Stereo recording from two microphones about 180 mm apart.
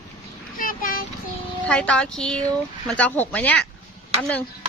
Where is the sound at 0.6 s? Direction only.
50° left (ahead or behind).